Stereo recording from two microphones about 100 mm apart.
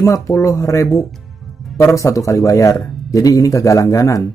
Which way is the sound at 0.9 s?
Centre (ahead or behind).